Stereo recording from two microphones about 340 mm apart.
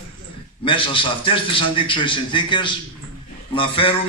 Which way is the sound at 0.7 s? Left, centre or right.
Centre.